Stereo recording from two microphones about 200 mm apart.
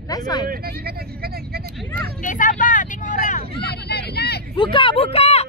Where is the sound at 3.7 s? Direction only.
55° left (ahead or behind).